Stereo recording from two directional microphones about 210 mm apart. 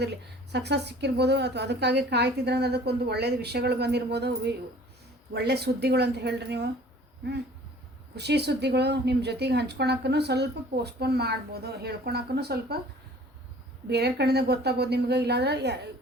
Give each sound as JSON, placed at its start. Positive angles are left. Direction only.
{"t": 0.0, "sound": "a woman's voice", "side_deg": -55}
{"t": 8.1, "sound": "a woman's voice", "side_deg": -50}
{"t": 13.8, "sound": "a woman's voice", "side_deg": -50}